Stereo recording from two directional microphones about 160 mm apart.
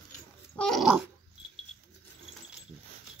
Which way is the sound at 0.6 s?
Centre (ahead or behind).